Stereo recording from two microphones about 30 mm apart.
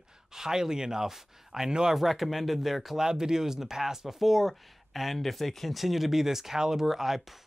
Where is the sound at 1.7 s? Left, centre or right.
Right.